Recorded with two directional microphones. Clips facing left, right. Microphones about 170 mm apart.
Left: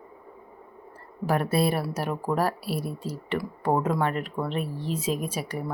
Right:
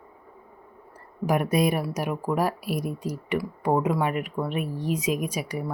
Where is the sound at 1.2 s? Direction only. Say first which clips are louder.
Right 1 dB; 15° right (ahead or behind).